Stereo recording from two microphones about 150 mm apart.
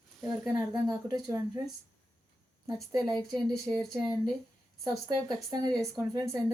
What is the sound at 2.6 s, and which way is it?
Speech, 25° right (ahead or behind).